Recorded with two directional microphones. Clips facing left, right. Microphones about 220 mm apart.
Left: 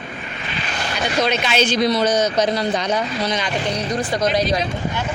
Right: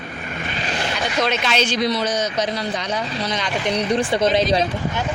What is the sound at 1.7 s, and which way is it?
A man's voice, 40° left (ahead or behind).